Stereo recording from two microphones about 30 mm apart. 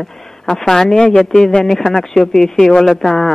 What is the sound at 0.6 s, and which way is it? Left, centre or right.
Speech, centre.